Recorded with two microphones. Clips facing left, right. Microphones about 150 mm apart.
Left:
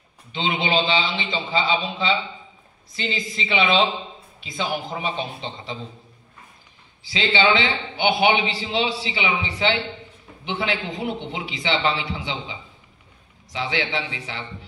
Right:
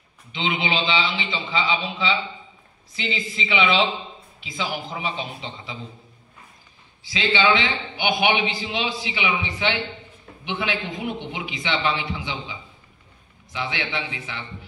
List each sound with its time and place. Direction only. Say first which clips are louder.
0.3 s a man's voice: left 2 dB; 35° left (ahead or behind)
7.1 s a man's voice: left 1 dB; 35° left (ahead or behind)